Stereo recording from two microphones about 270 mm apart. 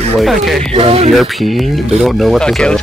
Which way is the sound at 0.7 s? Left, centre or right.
Right.